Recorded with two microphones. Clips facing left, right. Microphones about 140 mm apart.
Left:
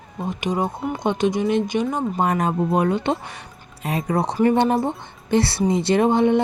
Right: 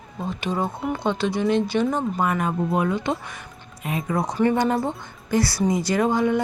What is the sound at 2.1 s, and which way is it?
Speech, 35° left (ahead or behind).